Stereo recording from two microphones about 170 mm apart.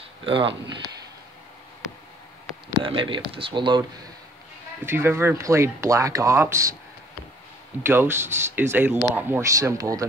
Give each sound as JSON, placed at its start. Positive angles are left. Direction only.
{"t": 0.2, "sound": "speech", "side_deg": -30}
{"t": 2.8, "sound": "speech", "side_deg": -30}
{"t": 4.8, "sound": "speech", "side_deg": -15}
{"t": 7.8, "sound": "speech", "side_deg": -15}